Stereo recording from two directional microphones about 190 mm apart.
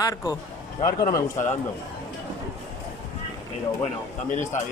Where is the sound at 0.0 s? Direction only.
20° left (ahead or behind).